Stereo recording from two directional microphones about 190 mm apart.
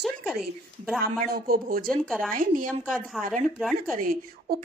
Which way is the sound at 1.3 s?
50° right (ahead or behind).